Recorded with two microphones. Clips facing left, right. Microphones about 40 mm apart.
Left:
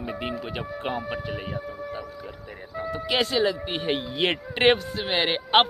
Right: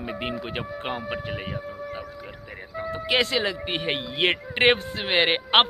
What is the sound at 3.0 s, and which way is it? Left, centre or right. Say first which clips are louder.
Speech: even; right.